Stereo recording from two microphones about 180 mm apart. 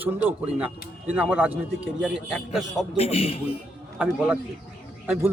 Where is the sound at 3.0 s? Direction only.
35° left (ahead or behind).